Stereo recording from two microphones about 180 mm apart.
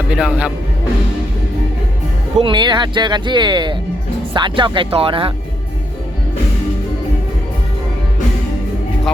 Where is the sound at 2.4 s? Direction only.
25° right (ahead or behind).